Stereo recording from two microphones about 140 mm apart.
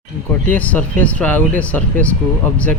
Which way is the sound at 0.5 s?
10° left (ahead or behind).